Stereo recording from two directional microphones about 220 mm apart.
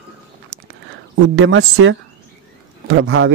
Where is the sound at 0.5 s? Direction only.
60° right (ahead or behind).